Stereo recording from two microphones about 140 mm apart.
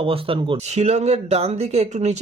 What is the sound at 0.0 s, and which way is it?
Speech, 40° right (ahead or behind).